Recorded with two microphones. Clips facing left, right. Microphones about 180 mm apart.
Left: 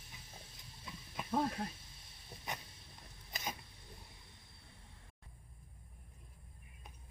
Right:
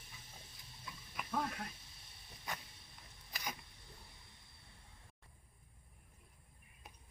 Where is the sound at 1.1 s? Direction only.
30° left (ahead or behind).